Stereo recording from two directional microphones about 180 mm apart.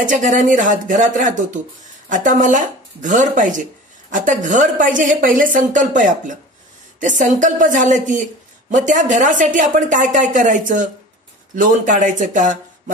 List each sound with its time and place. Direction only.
0.0 s a woman's voice: 45° right (ahead or behind)